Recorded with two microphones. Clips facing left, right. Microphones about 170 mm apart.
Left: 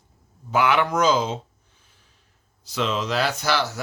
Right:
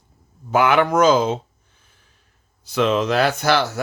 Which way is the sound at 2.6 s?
55° right (ahead or behind).